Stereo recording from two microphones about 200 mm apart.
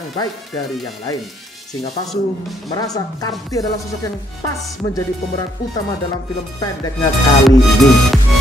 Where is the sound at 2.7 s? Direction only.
20° left (ahead or behind).